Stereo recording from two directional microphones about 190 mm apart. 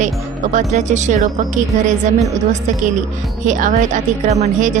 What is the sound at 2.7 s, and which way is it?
Speech, 40° right (ahead or behind).